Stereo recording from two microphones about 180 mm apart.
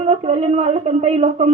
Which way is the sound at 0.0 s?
35° right (ahead or behind).